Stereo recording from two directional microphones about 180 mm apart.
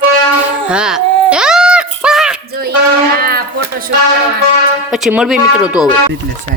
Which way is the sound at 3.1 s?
55° right (ahead or behind).